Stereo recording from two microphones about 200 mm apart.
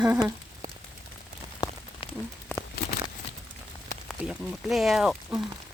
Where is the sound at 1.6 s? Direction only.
20° left (ahead or behind).